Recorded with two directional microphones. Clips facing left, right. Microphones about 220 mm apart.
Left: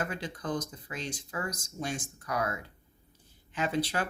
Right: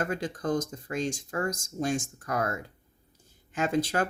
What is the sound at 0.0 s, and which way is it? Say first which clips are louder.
Speech: right 5 dB; 45° right (ahead or behind).